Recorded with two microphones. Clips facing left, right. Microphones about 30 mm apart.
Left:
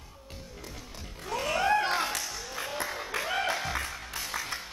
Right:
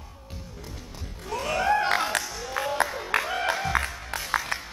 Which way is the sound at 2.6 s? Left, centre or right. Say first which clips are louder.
Right 9 dB; right.